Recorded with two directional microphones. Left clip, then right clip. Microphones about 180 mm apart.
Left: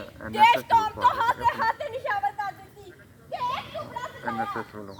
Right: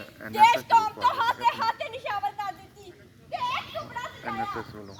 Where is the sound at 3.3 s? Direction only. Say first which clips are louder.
Even; 10° right (ahead or behind).